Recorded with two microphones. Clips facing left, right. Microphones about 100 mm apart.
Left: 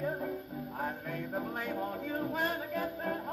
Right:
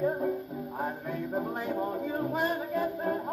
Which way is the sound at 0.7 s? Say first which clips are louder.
Right 4 dB; 15° right (ahead or behind).